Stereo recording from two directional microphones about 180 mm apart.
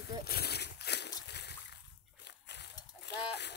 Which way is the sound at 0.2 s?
60° left (ahead or behind).